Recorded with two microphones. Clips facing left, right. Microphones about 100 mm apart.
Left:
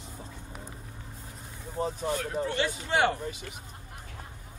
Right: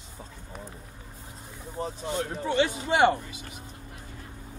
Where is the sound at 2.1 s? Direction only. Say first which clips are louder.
Right 3 dB; 20° right (ahead or behind).